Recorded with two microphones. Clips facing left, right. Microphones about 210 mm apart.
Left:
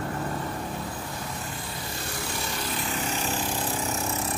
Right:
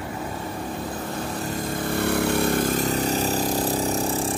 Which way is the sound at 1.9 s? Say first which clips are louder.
Right 15 dB; 60° right (ahead or behind).